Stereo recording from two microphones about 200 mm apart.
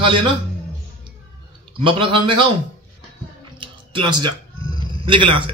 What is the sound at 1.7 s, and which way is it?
Speech, 25° right (ahead or behind).